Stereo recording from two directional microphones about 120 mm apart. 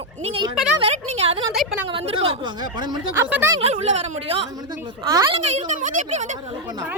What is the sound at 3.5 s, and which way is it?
Speech, 55° right (ahead or behind).